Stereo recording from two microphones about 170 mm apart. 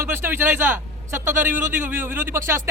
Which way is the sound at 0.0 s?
15° right (ahead or behind).